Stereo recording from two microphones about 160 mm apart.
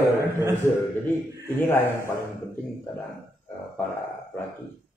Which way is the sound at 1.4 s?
15° left (ahead or behind).